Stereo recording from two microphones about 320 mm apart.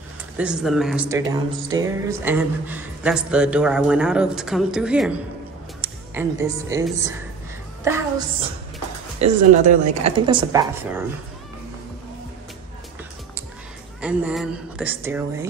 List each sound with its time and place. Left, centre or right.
0.4 s a woman's voice: centre
9.2 s a woman's voice: right
14.0 s speech: centre